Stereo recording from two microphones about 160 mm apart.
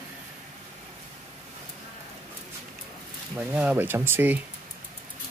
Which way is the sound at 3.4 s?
10° right (ahead or behind).